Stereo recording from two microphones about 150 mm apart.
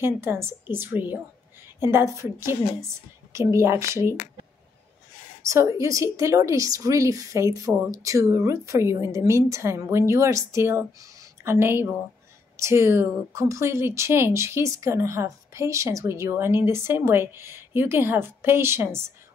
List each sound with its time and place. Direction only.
0.0 s a woman's voice: 15° right (ahead or behind)
5.4 s a woman's voice: 20° right (ahead or behind)